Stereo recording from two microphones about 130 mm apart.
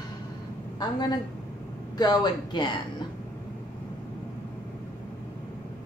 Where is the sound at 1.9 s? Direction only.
30° left (ahead or behind).